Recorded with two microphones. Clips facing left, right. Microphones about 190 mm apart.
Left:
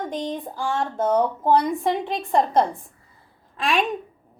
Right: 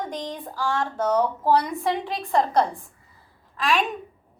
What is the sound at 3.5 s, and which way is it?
Speech, 30° left (ahead or behind).